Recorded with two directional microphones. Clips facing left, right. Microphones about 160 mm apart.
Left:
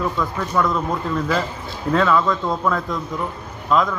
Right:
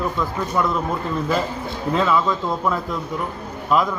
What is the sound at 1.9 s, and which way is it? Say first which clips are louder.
A man's voice: left 2 dB; 5° right (ahead or behind).